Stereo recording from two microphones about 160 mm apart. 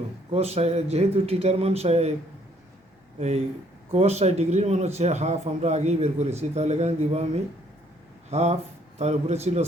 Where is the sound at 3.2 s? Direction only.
40° right (ahead or behind).